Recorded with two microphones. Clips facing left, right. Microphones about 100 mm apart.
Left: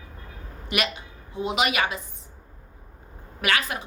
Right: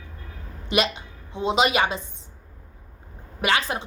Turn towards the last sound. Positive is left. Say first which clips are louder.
# right 2 dB
turn(degrees=-30)  # may be behind; listen again after turning